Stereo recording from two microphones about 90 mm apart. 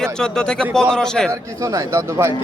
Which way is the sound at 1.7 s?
35° right (ahead or behind).